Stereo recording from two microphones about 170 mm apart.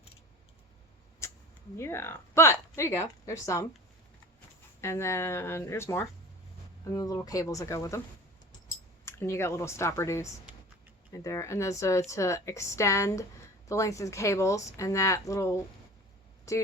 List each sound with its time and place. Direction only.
1.8 s speech: 15° left (ahead or behind)
4.8 s speech: 15° left (ahead or behind)
9.0 s speech: 15° left (ahead or behind)